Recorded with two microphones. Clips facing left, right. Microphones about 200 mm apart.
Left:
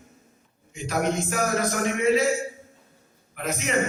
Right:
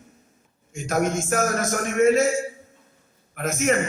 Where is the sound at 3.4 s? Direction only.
50° right (ahead or behind).